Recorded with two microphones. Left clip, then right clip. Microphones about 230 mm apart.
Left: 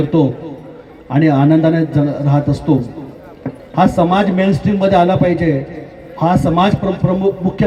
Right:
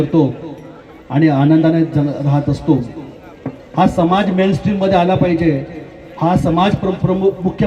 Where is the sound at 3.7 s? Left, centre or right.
Left.